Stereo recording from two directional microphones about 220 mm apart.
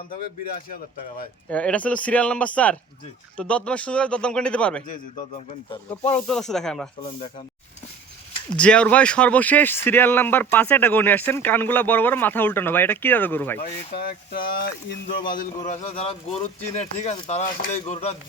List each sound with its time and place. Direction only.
1.5 s speech: 5° left (ahead or behind)
6.1 s speech: 5° left (ahead or behind)
8.5 s speech: 5° left (ahead or behind)
13.6 s speech: 45° left (ahead or behind)
15.6 s speech: 30° left (ahead or behind)